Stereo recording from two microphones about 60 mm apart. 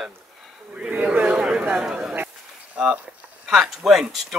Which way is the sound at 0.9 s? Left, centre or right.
Right.